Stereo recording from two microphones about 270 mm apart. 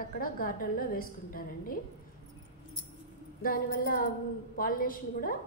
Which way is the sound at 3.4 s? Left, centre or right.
Left.